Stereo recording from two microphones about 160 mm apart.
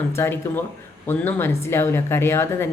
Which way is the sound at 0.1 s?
15° left (ahead or behind).